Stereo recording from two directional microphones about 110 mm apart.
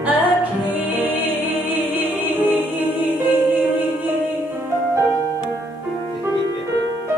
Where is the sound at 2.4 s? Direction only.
15° right (ahead or behind).